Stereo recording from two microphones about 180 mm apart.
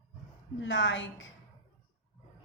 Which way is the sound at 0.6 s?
90° left.